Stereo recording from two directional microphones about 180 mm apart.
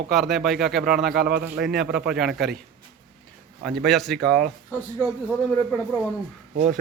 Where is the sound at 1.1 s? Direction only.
60° right (ahead or behind).